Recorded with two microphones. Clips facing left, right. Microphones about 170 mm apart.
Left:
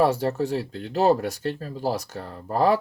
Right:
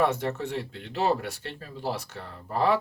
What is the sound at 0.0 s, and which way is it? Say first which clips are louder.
Speech: left 5 dB; 35° left (ahead or behind).